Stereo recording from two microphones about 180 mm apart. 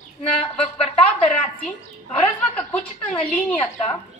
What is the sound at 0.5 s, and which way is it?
Speech, 5° left (ahead or behind).